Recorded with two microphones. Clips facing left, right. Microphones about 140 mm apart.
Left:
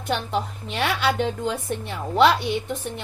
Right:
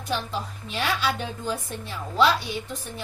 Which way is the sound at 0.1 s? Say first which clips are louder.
Left 4 dB; 65° left (ahead or behind).